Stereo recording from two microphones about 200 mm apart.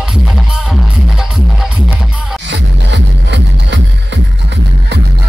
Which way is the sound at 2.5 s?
60° right (ahead or behind).